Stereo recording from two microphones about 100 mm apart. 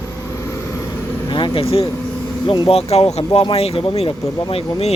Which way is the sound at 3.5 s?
80° left.